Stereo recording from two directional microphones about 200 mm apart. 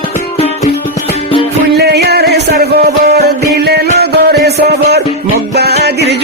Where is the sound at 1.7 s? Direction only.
55° right (ahead or behind).